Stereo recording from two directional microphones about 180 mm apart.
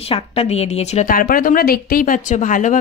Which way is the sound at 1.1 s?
50° left (ahead or behind).